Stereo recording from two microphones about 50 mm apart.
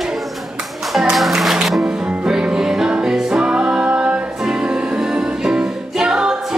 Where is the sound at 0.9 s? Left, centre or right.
Centre.